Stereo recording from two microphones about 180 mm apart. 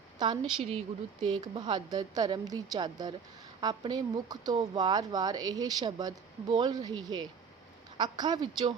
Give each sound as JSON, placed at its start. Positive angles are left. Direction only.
{"t": 0.6, "sound": "a woman's voice", "side_deg": -35}